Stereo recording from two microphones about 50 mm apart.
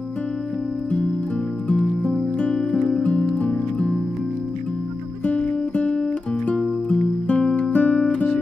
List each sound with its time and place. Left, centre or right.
2.3 s music: left
5.2 s music: left